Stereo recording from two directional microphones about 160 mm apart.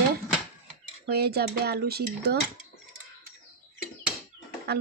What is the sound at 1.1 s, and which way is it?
Speech, 85° right.